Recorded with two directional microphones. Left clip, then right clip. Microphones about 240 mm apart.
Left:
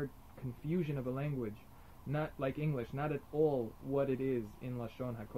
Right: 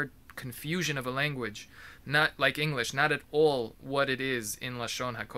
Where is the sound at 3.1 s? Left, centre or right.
Right.